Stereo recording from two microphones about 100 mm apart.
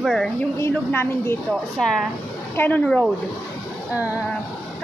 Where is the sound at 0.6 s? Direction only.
25° left (ahead or behind).